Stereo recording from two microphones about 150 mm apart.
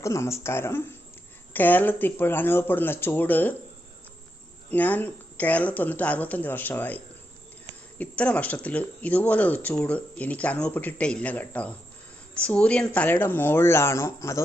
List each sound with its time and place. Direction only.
0.0 s speech: 20° left (ahead or behind)
4.7 s speech: 10° left (ahead or behind)